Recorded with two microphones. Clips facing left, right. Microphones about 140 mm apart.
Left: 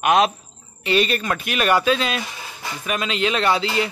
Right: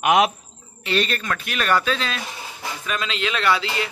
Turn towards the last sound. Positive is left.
turn(degrees=25)  # may be behind; listen again after turning